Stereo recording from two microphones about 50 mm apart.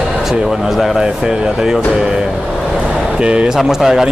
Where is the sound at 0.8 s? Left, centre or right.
Centre.